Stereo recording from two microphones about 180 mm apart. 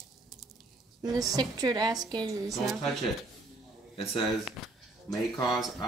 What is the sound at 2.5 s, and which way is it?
Speech, centre (ahead or behind).